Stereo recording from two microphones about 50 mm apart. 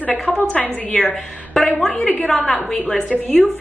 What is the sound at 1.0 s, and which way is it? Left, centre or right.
Speech, centre.